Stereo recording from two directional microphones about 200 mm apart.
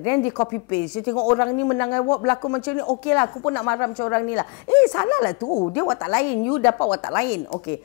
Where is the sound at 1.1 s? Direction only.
20° left (ahead or behind).